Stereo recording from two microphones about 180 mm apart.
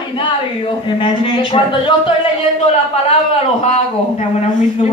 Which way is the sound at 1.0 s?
30° left (ahead or behind).